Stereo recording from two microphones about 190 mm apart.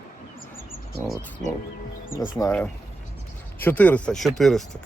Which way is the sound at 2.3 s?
15° left (ahead or behind).